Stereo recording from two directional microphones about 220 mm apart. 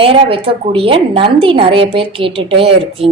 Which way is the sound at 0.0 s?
25° right (ahead or behind).